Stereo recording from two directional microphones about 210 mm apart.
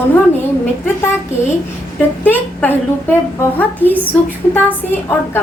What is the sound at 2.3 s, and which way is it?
A woman's voice, 10° left (ahead or behind).